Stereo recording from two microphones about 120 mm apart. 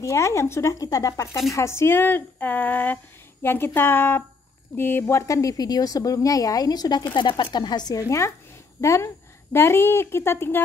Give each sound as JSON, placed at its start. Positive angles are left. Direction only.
{"t": 0.0, "sound": "a woman's voice", "side_deg": 25}
{"t": 8.8, "sound": "a woman's voice", "side_deg": 20}